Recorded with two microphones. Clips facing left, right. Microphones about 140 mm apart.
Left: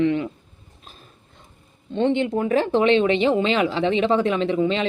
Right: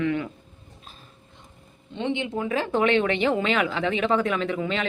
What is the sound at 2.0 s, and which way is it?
Speech, 50° left (ahead or behind).